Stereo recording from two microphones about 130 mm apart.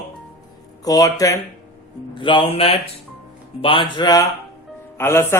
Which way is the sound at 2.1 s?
40° left (ahead or behind).